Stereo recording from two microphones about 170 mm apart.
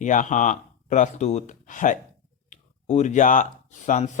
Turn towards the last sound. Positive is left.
turn(degrees=45)  # may be behind; listen again after turning